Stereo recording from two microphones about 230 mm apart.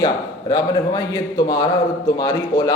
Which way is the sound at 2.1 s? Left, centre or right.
Centre.